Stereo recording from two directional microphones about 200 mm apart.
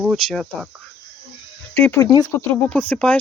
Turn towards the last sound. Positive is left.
turn(degrees=5)  # may be behind; listen again after turning